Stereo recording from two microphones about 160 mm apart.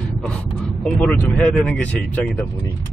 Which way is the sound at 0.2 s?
5° left (ahead or behind).